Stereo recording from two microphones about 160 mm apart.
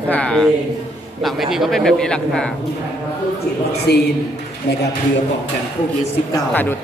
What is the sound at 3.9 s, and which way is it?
Speech, 90° left.